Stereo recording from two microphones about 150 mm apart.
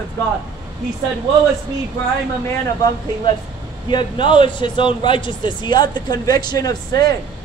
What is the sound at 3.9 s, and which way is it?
Speech, 35° left (ahead or behind).